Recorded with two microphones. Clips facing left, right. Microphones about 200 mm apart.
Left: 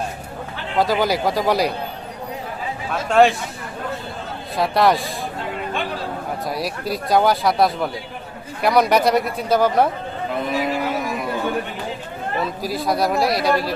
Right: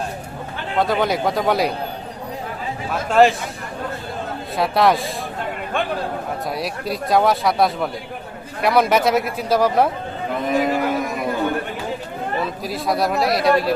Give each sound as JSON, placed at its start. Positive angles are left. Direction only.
{"t": 0.8, "sound": "speech", "side_deg": 5}
{"t": 3.1, "sound": "speech", "side_deg": 0}
{"t": 4.5, "sound": "speech", "side_deg": 0}
{"t": 6.5, "sound": "speech", "side_deg": 0}
{"t": 10.5, "sound": "a sound", "side_deg": -50}
{"t": 12.6, "sound": "speech", "side_deg": 0}